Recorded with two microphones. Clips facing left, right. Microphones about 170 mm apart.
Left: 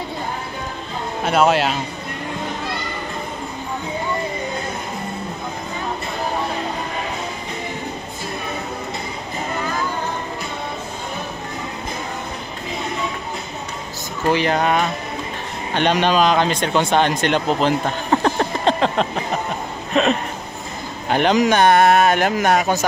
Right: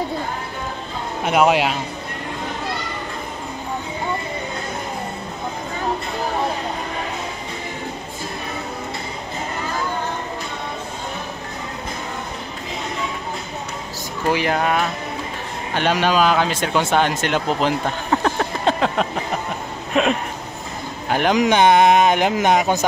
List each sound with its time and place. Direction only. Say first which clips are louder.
1.2 s speech: even; 15° right (ahead or behind)
14.3 s speech: left 2 dB; 10° right (ahead or behind)
18.1 s a sound: left 2 dB; centre (ahead or behind)
19.9 s speech: left 1 dB; 10° right (ahead or behind)